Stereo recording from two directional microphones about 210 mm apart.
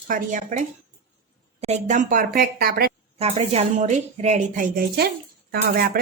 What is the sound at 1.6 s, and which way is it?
A woman's voice, 35° right (ahead or behind).